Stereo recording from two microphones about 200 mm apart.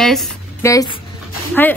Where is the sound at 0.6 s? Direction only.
15° left (ahead or behind).